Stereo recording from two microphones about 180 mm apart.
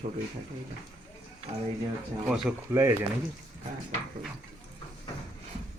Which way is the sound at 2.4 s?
15° right (ahead or behind).